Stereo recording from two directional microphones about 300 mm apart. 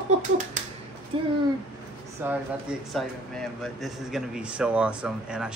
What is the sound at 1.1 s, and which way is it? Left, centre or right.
Speech, centre.